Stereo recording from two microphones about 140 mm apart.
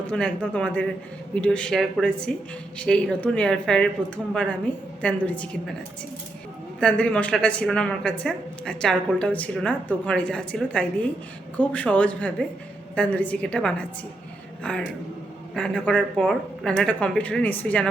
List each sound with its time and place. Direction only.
0.1 s a woman's voice: 10° left (ahead or behind)
5.0 s a woman's voice: 10° left (ahead or behind)
6.7 s a woman's voice: 5° left (ahead or behind)